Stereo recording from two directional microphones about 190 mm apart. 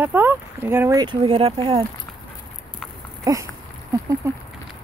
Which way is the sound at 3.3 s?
20° right (ahead or behind).